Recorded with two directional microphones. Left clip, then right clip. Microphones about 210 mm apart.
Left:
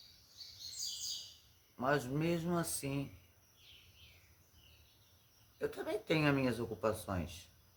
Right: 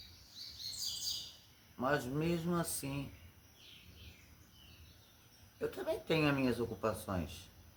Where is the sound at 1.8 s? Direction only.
40° left (ahead or behind).